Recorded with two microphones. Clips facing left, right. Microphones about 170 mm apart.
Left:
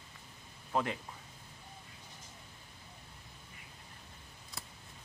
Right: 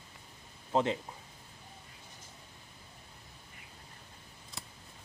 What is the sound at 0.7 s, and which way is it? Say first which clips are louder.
Speech: right 4 dB; 25° right (ahead or behind).